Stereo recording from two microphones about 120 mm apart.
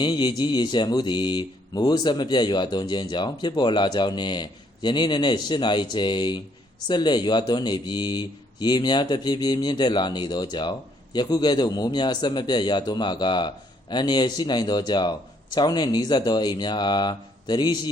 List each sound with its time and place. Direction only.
0.0 s speech: 40° left (ahead or behind)